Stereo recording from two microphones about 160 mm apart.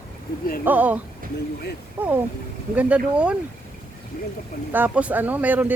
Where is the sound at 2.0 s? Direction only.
10° right (ahead or behind).